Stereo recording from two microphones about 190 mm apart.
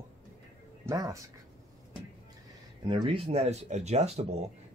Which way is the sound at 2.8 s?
25° right (ahead or behind).